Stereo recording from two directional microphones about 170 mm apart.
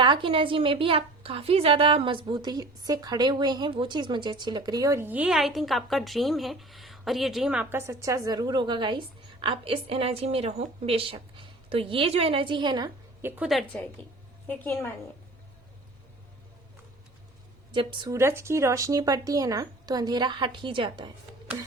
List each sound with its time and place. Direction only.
0.0 s a woman's voice: 30° right (ahead or behind)
13.2 s a woman's voice: 10° right (ahead or behind); by 14.8 s 10° left (ahead or behind)
17.7 s a woman's voice: 25° right (ahead or behind)